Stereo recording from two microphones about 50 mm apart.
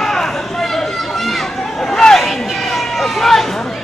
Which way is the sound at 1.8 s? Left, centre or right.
Centre.